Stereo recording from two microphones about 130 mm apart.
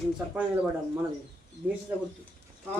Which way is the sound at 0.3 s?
10° right (ahead or behind).